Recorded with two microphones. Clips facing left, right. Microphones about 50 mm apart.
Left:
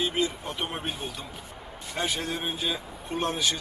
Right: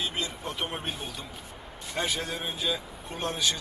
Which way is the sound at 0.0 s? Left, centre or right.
Centre.